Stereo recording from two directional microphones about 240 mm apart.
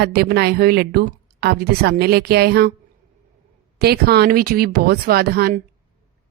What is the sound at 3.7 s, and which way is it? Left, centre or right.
A woman's voice, right.